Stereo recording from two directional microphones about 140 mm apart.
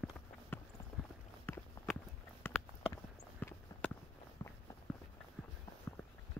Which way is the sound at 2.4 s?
15° left (ahead or behind).